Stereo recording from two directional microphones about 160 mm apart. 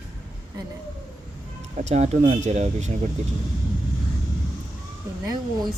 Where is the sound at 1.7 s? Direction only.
45° right (ahead or behind).